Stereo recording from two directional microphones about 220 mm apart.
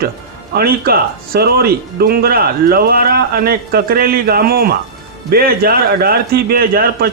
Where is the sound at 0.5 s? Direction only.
45° right (ahead or behind).